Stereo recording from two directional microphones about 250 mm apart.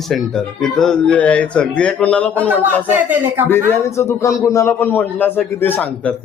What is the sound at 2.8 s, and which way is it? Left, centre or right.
Speech, centre.